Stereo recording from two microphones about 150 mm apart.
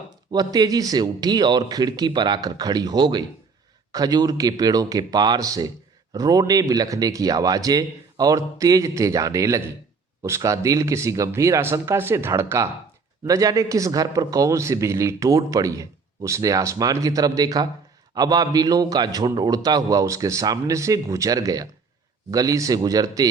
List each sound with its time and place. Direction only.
0.3 s a man's voice: 25° right (ahead or behind)